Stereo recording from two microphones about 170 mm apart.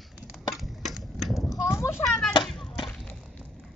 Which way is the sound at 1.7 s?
15° left (ahead or behind).